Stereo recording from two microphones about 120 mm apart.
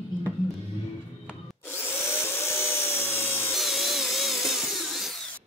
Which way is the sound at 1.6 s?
20° left (ahead or behind).